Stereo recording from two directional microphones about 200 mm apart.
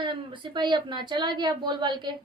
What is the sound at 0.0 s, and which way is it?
A woman's voice, 25° right (ahead or behind).